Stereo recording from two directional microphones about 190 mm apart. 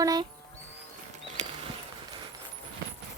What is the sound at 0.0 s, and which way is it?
Speech, 20° right (ahead or behind).